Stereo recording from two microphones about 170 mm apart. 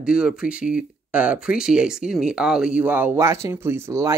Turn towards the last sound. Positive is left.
turn(degrees=-15)  # may be behind; listen again after turning